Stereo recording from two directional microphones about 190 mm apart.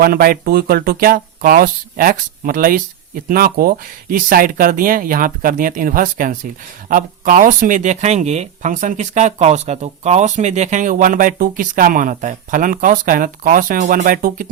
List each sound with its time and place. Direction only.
0.0 s speech: 50° right (ahead or behind)